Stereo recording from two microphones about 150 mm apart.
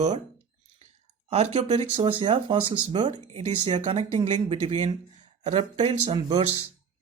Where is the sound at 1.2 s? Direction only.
45° right (ahead or behind).